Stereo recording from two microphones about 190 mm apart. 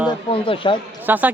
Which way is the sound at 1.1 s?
10° right (ahead or behind).